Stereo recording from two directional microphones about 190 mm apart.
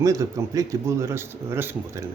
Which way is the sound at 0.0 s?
15° right (ahead or behind).